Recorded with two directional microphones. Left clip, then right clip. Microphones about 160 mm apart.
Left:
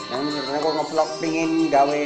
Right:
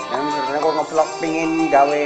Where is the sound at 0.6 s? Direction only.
45° right (ahead or behind).